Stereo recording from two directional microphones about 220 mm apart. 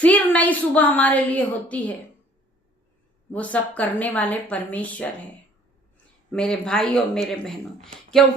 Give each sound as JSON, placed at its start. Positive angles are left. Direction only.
{"t": 0.0, "sound": "a woman's voice", "side_deg": 5}
{"t": 3.3, "sound": "a woman's voice", "side_deg": 5}
{"t": 6.3, "sound": "speech", "side_deg": 5}